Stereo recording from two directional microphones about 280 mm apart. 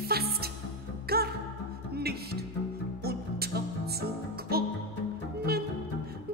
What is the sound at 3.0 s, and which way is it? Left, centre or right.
Music, right.